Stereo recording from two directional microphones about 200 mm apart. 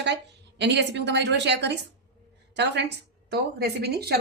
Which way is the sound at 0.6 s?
60° right (ahead or behind).